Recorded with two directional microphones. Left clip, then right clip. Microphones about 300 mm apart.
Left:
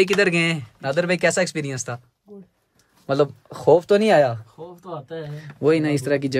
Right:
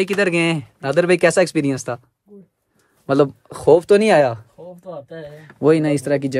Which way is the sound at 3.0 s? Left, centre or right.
Centre.